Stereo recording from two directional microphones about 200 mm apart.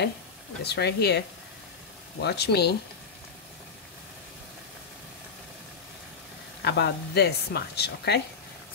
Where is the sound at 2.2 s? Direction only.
55° left (ahead or behind).